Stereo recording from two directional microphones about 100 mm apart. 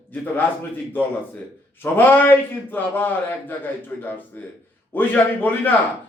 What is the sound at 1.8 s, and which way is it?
A man's voice, 20° left (ahead or behind).